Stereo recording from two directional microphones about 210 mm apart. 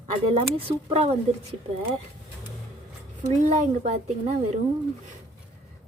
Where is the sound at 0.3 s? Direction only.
30° right (ahead or behind).